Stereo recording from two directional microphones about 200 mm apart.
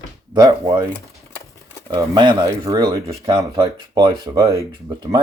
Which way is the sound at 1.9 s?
25° right (ahead or behind).